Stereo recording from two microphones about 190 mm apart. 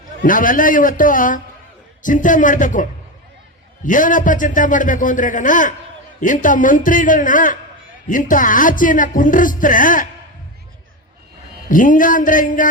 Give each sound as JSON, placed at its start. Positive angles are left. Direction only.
{"t": 0.2, "sound": "speech", "side_deg": 45}
{"t": 3.8, "sound": "speech", "side_deg": 45}
{"t": 11.7, "sound": "speech", "side_deg": 45}